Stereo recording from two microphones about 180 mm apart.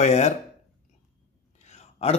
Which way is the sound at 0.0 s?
40° left (ahead or behind).